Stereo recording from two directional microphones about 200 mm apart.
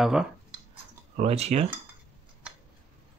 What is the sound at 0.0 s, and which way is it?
Speech, centre (ahead or behind).